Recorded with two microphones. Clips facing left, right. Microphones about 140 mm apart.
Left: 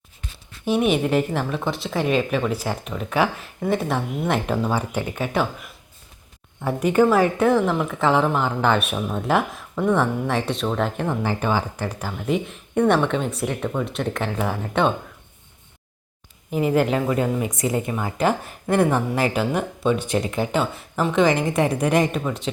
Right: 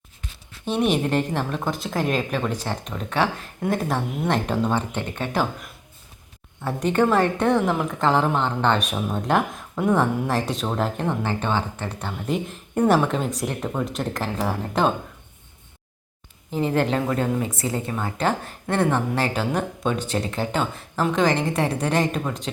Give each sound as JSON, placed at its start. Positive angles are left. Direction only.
{"t": 0.6, "sound": "a woman's voice", "side_deg": 5}
{"t": 16.5, "sound": "speech", "side_deg": 10}
{"t": 17.5, "sound": "a woman's voice", "side_deg": 20}